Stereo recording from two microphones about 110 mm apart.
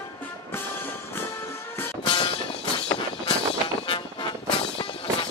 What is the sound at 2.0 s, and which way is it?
Music, 45° left (ahead or behind).